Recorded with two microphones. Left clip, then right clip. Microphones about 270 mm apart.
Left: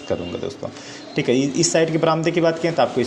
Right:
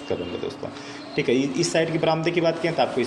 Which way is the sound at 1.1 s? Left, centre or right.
Left.